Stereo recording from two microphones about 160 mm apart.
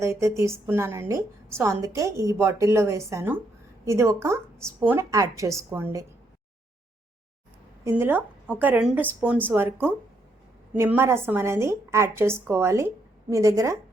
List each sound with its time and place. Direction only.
0.0 s a woman's voice: 20° right (ahead or behind)
7.9 s a woman's voice: 15° right (ahead or behind)
10.8 s a woman's voice: 15° right (ahead or behind)